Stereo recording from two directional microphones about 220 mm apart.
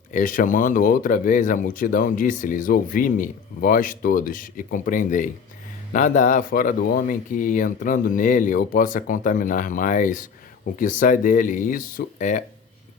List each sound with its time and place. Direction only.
0.1 s speech: 40° left (ahead or behind)